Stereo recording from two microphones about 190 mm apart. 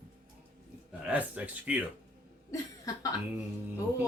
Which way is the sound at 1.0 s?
5° right (ahead or behind).